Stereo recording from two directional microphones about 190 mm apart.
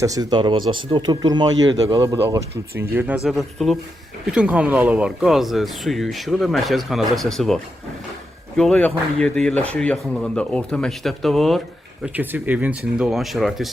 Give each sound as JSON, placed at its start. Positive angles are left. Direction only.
{"t": 0.0, "sound": "speech", "side_deg": -20}
{"t": 3.2, "sound": "speech", "side_deg": 0}
{"t": 12.0, "sound": "speech", "side_deg": -10}